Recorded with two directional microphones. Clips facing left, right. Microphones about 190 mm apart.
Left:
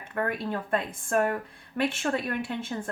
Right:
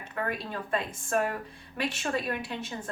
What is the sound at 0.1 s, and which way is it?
A woman's voice, 50° left (ahead or behind).